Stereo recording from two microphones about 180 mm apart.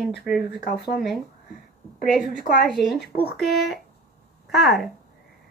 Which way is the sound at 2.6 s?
Centre (ahead or behind).